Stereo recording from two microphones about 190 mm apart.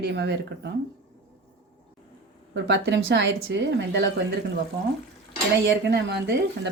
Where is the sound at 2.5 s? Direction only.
70° right (ahead or behind).